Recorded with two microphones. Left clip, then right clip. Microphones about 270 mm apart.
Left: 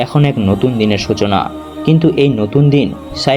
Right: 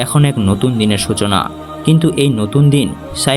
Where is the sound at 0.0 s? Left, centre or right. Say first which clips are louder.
Left 2 dB; right.